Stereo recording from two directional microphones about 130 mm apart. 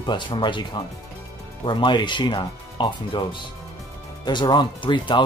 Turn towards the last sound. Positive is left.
turn(degrees=40)  # may be behind; listen again after turning